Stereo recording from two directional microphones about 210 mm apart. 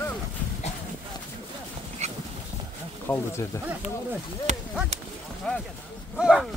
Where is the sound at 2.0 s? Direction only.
30° right (ahead or behind).